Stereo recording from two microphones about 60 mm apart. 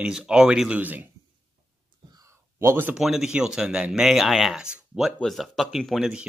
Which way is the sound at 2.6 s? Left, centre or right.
Right.